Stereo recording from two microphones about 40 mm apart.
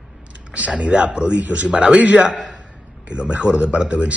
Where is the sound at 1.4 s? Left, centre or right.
Right.